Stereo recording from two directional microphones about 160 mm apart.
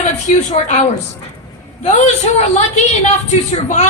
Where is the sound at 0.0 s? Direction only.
45° left (ahead or behind).